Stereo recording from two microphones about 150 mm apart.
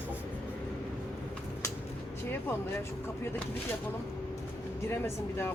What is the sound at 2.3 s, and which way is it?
Speech, 15° left (ahead or behind).